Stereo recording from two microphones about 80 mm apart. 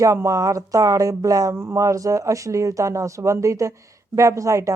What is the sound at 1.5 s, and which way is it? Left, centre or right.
A woman's voice, right.